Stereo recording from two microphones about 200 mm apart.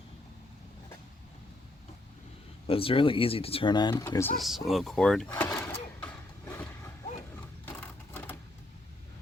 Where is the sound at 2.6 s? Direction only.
25° left (ahead or behind).